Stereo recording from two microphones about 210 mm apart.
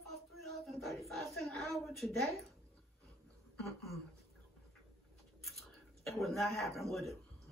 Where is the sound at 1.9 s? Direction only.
Centre (ahead or behind).